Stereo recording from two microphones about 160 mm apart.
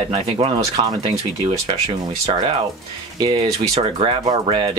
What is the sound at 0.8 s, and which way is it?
Speech, 40° right (ahead or behind).